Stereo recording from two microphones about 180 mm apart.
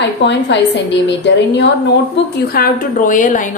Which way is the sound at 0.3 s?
75° left (ahead or behind).